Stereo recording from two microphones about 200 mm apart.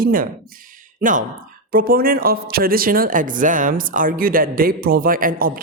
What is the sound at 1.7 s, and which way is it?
Speech, 45° right (ahead or behind).